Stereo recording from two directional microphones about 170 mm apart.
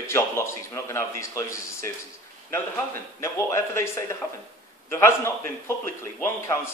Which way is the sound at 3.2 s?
15° left (ahead or behind).